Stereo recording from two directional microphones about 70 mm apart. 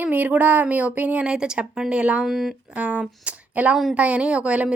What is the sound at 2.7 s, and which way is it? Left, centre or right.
A woman's voice, centre.